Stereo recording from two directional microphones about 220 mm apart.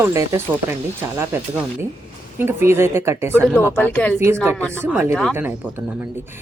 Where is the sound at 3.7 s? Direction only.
10° left (ahead or behind).